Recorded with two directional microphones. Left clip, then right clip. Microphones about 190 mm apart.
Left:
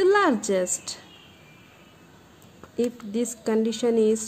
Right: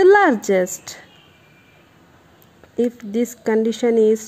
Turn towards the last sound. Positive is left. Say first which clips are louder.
# right 6 dB
turn(degrees=-25)  # may be behind; listen again after turning